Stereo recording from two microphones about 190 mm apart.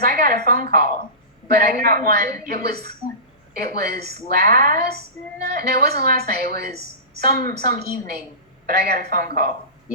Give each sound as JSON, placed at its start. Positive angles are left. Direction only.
{"t": 0.0, "sound": "a woman's voice", "side_deg": -50}